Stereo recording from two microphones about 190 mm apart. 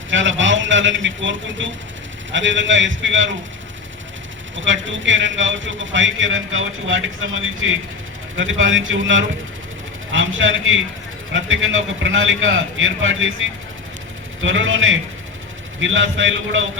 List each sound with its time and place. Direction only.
0.1 s a man's voice: 80° right
4.5 s a man's voice: 80° right